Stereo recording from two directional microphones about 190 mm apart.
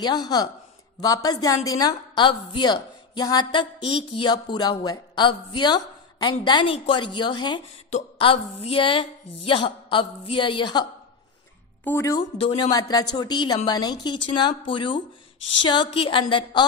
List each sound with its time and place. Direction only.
0.0 s a woman's voice: 20° left (ahead or behind)